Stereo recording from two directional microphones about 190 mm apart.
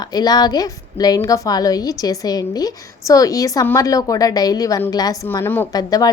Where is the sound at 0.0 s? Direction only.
20° left (ahead or behind).